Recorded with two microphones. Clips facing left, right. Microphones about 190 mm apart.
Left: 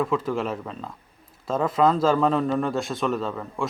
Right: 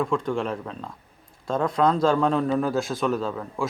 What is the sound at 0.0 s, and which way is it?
A man's voice, 5° left (ahead or behind).